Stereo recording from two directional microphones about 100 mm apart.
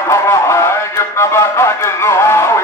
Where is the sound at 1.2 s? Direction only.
25° left (ahead or behind).